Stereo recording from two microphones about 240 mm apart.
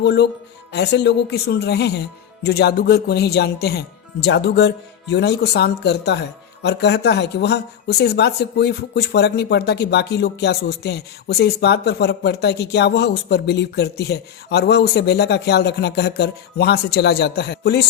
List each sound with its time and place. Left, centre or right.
0.0 s speech: left